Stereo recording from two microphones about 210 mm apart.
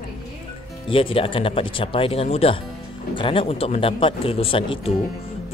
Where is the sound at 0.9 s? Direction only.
25° left (ahead or behind).